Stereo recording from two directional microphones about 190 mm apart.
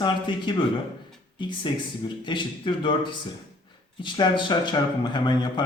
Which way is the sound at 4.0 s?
25° left (ahead or behind).